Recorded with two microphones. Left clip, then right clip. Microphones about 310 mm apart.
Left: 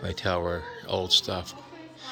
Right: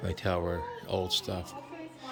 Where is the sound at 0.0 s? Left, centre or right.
Centre.